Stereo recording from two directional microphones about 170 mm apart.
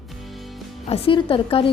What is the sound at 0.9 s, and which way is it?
Speech, 30° left (ahead or behind).